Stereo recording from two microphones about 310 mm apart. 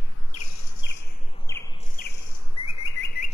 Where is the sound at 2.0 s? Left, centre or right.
Left.